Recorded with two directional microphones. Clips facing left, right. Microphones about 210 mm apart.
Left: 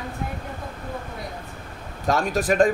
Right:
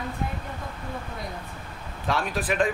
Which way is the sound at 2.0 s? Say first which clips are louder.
Left 5 dB; 45° left (ahead or behind).